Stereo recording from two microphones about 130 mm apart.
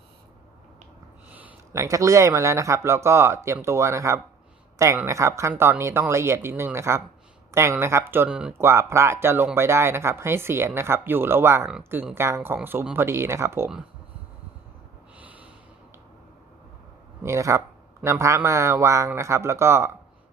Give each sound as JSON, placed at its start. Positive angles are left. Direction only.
{"t": 1.3, "sound": "a sound", "side_deg": -10}
{"t": 1.7, "sound": "speech", "side_deg": -25}
{"t": 8.3, "sound": "speech", "side_deg": -5}
{"t": 8.5, "sound": "speech", "side_deg": -20}
{"t": 15.2, "sound": "snort", "side_deg": -10}
{"t": 17.2, "sound": "speech", "side_deg": -25}